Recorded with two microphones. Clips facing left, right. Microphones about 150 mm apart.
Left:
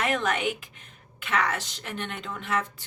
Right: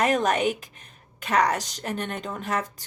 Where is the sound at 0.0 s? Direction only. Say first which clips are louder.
Right 4 dB; 40° right (ahead or behind).